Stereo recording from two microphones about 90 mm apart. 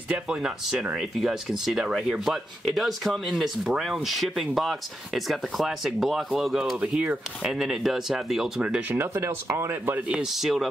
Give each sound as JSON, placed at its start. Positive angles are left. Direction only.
{"t": 0.1, "sound": "speech", "side_deg": -10}
{"t": 8.8, "sound": "speech", "side_deg": -25}
{"t": 10.0, "sound": "speech", "side_deg": -10}